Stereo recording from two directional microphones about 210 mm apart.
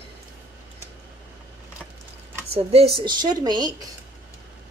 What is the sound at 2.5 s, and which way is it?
A woman's voice, 30° right (ahead or behind).